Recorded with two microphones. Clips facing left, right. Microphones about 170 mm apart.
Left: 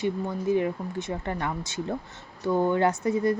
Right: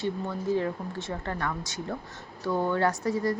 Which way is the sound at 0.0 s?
15° left (ahead or behind).